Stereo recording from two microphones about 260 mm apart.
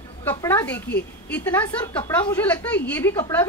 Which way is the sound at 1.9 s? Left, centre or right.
Centre.